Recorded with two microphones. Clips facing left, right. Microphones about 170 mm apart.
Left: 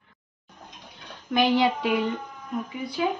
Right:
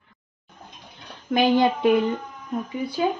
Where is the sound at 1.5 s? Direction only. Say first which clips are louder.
Right 4 dB; 50° right (ahead or behind).